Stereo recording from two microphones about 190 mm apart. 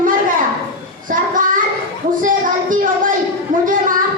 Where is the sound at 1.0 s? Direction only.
45° right (ahead or behind).